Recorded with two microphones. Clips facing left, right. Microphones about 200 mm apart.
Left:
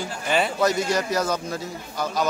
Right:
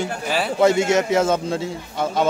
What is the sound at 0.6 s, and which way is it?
A man's voice, 25° right (ahead or behind).